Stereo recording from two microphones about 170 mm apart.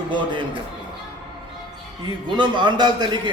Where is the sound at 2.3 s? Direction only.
25° right (ahead or behind).